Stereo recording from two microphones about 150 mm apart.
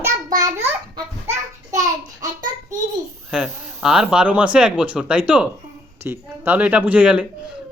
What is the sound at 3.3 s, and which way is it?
Speech, 5° right (ahead or behind).